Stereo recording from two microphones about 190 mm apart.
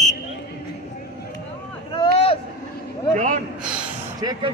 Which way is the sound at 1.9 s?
30° left (ahead or behind).